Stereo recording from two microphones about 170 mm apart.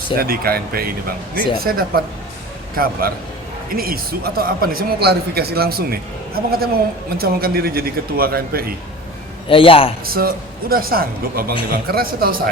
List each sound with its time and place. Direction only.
0.2 s speech: 60° right (ahead or behind)
9.5 s a man's voice: 30° left (ahead or behind)
10.1 s speech: 60° right (ahead or behind)